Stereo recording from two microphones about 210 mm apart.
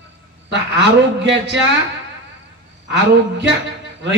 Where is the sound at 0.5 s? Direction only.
55° right (ahead or behind).